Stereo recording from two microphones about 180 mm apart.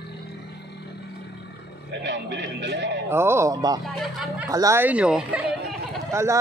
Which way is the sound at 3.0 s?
15° right (ahead or behind).